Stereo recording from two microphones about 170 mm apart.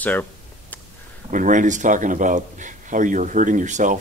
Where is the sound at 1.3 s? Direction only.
50° right (ahead or behind).